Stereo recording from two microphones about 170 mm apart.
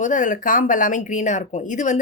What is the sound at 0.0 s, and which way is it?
A woman's voice, 50° left (ahead or behind).